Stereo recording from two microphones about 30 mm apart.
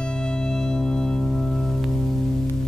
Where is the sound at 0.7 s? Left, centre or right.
Left.